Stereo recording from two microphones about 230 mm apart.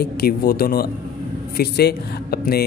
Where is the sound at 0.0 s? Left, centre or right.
Left.